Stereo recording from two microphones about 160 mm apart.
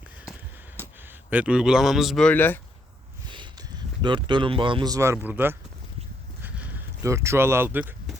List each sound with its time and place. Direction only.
1.0 s a man's voice: 10° right (ahead or behind); by 2.6 s 10° left (ahead or behind)
3.2 s speech: 30° right (ahead or behind); by 5.5 s 10° right (ahead or behind)
6.4 s a sound: 10° right (ahead or behind)